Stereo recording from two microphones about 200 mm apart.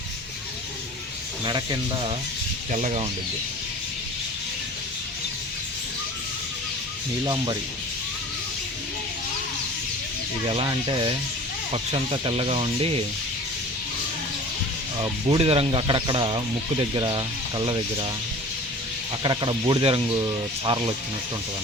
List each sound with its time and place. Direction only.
2.7 s speech: 35° right (ahead or behind)
10.5 s speech: 25° right (ahead or behind)
15.3 s speech: 30° right (ahead or behind)
19.2 s speech: 25° right (ahead or behind)